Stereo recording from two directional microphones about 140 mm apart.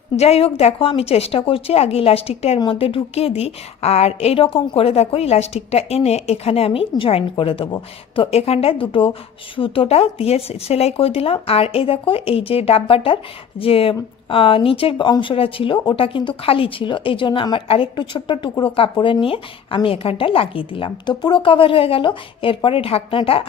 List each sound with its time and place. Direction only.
0.2 s a woman's voice: 45° left (ahead or behind)